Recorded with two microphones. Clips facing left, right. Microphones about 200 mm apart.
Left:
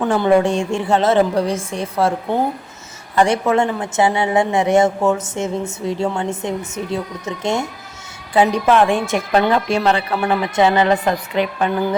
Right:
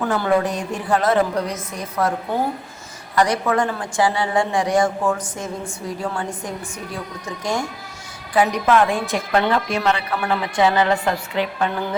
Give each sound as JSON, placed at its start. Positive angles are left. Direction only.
{"t": 0.0, "sound": "a woman's voice", "side_deg": 25}
{"t": 3.2, "sound": "a woman's voice", "side_deg": 25}